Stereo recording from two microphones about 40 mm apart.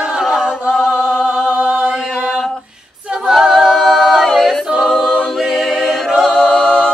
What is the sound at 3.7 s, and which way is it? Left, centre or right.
A capella, centre.